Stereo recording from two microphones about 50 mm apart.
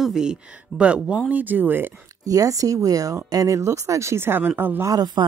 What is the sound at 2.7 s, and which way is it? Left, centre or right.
Speech, right.